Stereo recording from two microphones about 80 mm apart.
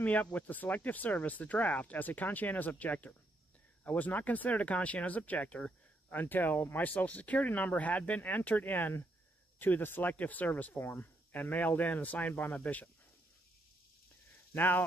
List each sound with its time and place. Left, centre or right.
0.0 s speech: centre
14.5 s speech: left